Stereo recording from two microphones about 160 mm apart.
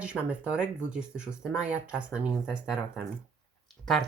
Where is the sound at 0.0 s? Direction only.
5° right (ahead or behind).